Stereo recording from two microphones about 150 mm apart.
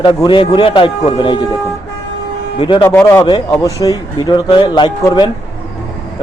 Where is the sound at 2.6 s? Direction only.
35° left (ahead or behind).